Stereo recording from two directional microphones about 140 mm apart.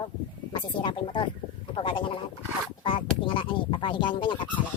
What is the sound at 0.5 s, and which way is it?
Speech, 35° left (ahead or behind).